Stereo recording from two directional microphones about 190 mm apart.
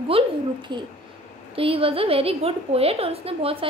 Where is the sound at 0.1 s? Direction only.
25° right (ahead or behind).